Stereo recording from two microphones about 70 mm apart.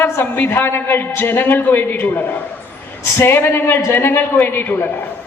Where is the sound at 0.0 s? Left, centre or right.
Left.